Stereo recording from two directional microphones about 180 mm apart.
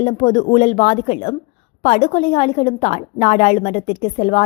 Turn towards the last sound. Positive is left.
turn(degrees=40)  # may be behind; listen again after turning